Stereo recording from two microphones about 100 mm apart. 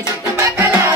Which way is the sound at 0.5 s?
20° right (ahead or behind).